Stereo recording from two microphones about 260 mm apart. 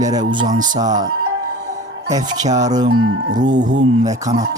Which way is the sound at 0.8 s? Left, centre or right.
Centre.